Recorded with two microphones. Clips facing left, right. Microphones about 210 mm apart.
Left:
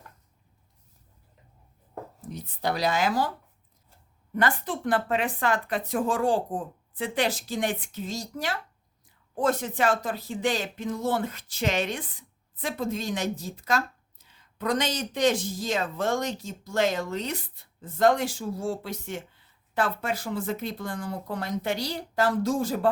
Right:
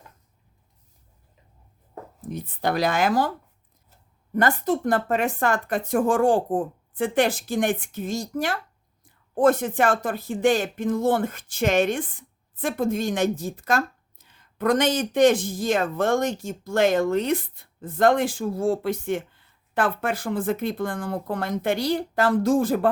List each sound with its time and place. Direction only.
2.2 s speech: 55° right (ahead or behind)
4.4 s speech: 40° right (ahead or behind)